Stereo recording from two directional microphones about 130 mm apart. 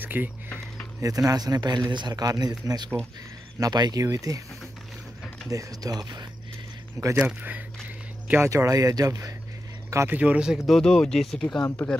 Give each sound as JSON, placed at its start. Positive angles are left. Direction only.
{"t": 0.0, "sound": "speech", "side_deg": -15}
{"t": 1.0, "sound": "speech", "side_deg": -25}
{"t": 5.5, "sound": "speech", "side_deg": -25}
{"t": 7.2, "sound": "speech", "side_deg": -10}
{"t": 8.3, "sound": "speech", "side_deg": -20}
{"t": 10.1, "sound": "speech", "side_deg": -10}
{"t": 10.7, "sound": "speech", "side_deg": 5}